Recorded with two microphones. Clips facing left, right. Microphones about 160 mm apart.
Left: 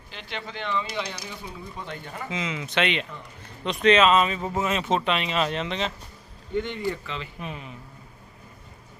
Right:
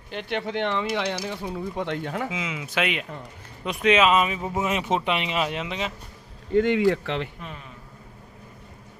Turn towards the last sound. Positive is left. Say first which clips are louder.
# left 3 dB
turn(degrees=15)  # may be behind; listen again after turning